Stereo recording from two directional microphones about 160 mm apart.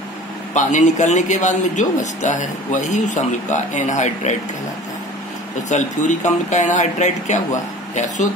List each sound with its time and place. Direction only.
0.6 s a man's voice: 50° left (ahead or behind)
5.7 s a man's voice: 50° left (ahead or behind)